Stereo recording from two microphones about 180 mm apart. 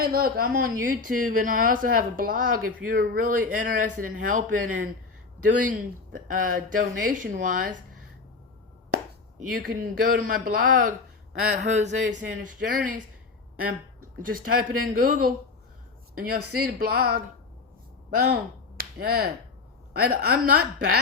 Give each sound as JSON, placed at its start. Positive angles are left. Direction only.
{"t": 0.0, "sound": "speech", "side_deg": -55}
{"t": 9.4, "sound": "speech", "side_deg": -50}
{"t": 16.3, "sound": "speech", "side_deg": -55}
{"t": 18.8, "sound": "finger snapping", "side_deg": -55}
{"t": 19.9, "sound": "speech", "side_deg": -55}